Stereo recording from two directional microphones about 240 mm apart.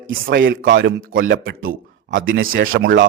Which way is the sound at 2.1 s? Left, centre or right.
Right.